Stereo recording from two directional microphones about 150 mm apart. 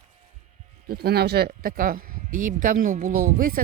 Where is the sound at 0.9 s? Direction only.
90° right.